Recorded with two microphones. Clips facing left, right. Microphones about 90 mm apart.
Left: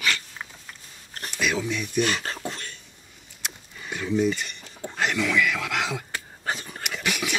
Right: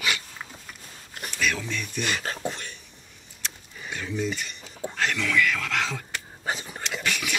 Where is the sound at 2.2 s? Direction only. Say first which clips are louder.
Right 1 dB; 5° right (ahead or behind).